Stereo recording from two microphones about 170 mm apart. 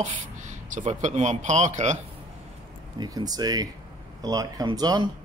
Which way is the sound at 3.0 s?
25° right (ahead or behind).